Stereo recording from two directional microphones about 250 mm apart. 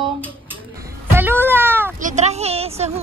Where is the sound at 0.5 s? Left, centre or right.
Centre.